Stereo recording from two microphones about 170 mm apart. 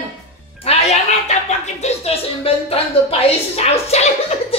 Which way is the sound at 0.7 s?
35° left (ahead or behind).